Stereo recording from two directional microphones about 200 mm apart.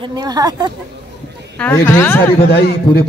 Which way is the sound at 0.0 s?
20° right (ahead or behind).